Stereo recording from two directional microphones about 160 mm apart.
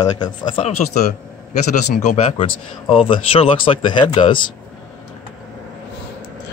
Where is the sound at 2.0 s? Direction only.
45° left (ahead or behind).